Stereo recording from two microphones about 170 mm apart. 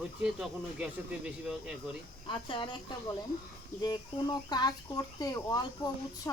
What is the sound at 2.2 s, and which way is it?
Speech, 30° left (ahead or behind).